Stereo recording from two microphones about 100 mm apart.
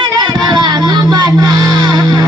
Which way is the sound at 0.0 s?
50° right (ahead or behind).